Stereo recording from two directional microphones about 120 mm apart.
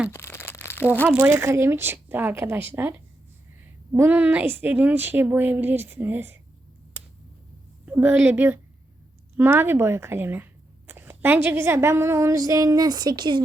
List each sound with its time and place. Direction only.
0.1 s crumpling: 20° left (ahead or behind)
1.0 s a woman's voice: 20° right (ahead or behind)
7.0 s a sound: 20° right (ahead or behind)
7.9 s a woman's voice: 15° right (ahead or behind); by 13.4 s 40° right (ahead or behind)